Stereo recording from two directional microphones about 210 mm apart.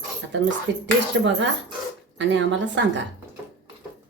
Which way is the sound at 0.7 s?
60° right (ahead or behind).